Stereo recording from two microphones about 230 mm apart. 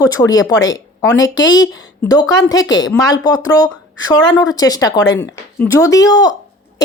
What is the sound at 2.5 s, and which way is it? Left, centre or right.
Speech, left.